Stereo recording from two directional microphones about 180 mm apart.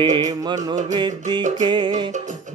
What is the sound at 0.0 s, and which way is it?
Music, 25° right (ahead or behind).